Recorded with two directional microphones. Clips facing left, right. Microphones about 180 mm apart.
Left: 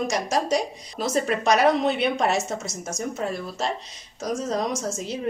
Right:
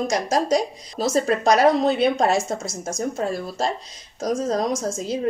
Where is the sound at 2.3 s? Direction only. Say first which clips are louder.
Right 3 dB; 90° right.